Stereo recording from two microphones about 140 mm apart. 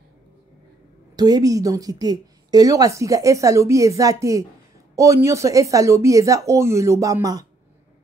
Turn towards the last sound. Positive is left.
turn(degrees=-25)  # may be behind; listen again after turning